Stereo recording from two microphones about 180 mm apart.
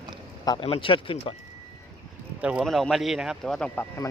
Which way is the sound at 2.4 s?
5° right (ahead or behind).